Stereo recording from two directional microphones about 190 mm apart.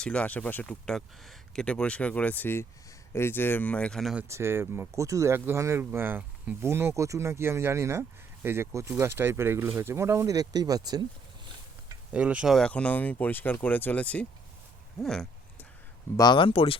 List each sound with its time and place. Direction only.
0.0 s speech: 5° left (ahead or behind); by 11.0 s 20° right (ahead or behind)
12.1 s speech: 5° right (ahead or behind)
15.0 s a sound: 5° left (ahead or behind)
16.1 s speech: 25° left (ahead or behind)